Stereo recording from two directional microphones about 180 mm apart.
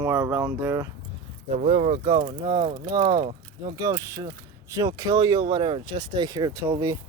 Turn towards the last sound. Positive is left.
turn(degrees=-15)  # may be behind; listen again after turning